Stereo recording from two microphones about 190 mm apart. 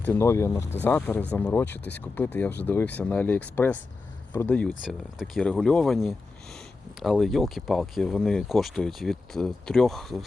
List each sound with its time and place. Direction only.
0.0 s speech: 15° left (ahead or behind)